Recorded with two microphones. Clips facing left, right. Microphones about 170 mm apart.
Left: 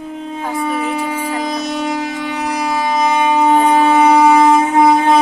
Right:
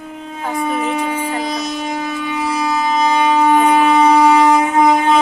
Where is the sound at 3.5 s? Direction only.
30° left (ahead or behind).